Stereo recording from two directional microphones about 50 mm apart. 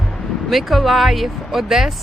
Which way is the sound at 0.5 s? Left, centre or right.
Centre.